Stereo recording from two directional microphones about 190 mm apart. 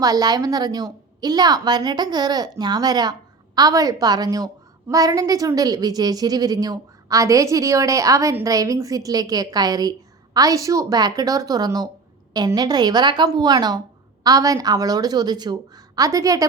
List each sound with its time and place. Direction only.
0.0 s a woman's voice: 20° right (ahead or behind)